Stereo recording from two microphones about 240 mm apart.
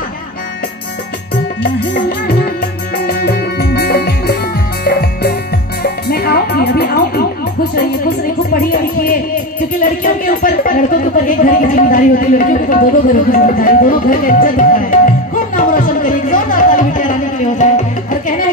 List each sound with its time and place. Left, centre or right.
1.6 s music: left
11.2 s speech: left